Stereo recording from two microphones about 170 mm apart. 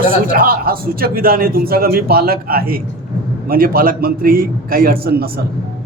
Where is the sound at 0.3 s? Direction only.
60° right (ahead or behind).